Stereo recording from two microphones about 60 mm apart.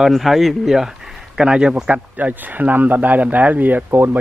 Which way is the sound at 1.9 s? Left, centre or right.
Right.